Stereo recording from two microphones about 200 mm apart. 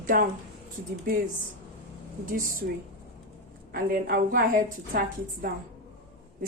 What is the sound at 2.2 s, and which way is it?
Speech, 40° right (ahead or behind).